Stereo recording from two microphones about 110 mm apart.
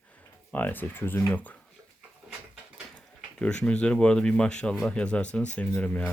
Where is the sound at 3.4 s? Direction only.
10° left (ahead or behind).